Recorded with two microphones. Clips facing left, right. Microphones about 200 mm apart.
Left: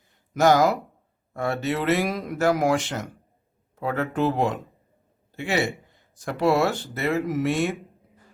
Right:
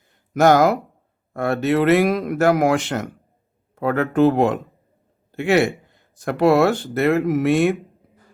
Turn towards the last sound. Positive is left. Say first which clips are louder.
# right 7 dB
turn(degrees=-60)  # may be behind; listen again after turning